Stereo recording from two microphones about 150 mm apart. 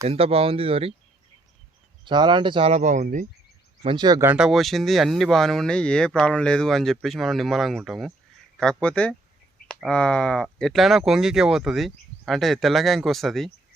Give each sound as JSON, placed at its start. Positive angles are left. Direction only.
{"t": 0.0, "sound": "speech", "side_deg": -45}
{"t": 2.0, "sound": "speech", "side_deg": -30}
{"t": 2.7, "sound": "speech", "side_deg": -55}
{"t": 3.8, "sound": "speech", "side_deg": -30}
{"t": 4.4, "sound": "speech", "side_deg": 0}